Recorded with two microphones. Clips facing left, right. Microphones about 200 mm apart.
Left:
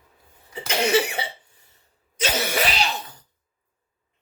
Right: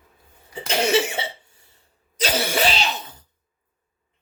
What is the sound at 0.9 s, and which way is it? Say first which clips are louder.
Speech: left 1 dB; 25° right (ahead or behind).